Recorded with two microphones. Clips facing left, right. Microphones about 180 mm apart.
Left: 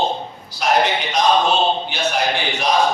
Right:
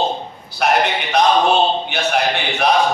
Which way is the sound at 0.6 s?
65° right (ahead or behind).